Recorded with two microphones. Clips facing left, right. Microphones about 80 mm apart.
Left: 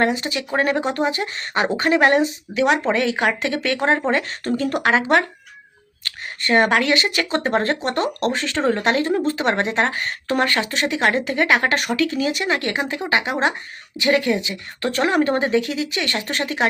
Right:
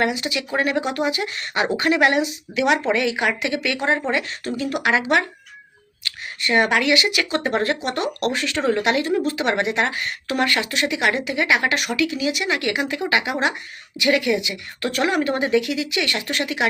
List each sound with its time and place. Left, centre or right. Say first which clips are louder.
0.0 s speech: left 2 dB; left